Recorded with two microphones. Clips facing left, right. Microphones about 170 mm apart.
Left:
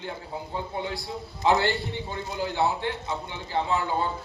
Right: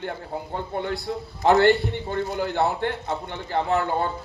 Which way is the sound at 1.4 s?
55° right (ahead or behind).